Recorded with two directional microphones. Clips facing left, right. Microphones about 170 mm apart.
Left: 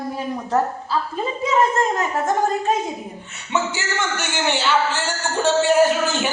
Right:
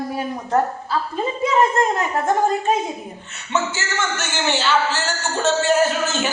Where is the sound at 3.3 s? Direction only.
15° left (ahead or behind).